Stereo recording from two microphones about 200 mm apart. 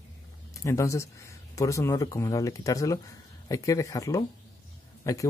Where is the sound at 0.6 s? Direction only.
15° left (ahead or behind).